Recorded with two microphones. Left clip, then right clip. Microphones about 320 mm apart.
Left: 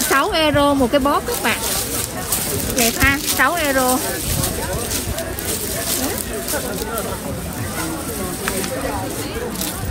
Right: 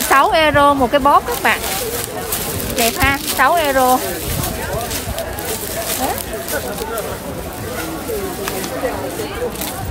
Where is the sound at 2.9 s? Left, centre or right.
Right.